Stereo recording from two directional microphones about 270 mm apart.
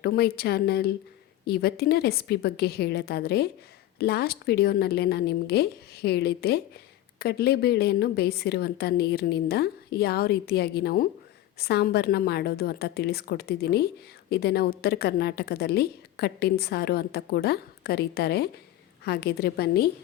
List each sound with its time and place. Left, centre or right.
0.0 s a woman's voice: left